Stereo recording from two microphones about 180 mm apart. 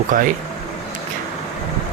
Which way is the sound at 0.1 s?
45° right (ahead or behind).